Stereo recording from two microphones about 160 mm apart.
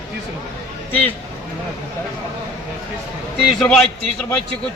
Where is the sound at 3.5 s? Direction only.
5° left (ahead or behind).